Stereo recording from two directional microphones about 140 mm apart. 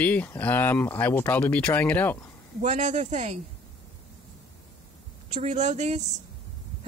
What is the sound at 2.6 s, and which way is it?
Speech, 60° right (ahead or behind).